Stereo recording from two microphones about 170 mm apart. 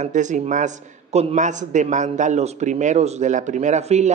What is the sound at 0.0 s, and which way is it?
A man's voice, 45° right (ahead or behind).